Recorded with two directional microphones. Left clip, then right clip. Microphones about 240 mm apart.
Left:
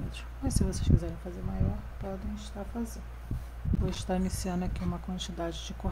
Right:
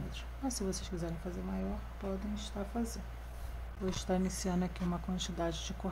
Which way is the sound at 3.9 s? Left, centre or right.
Centre.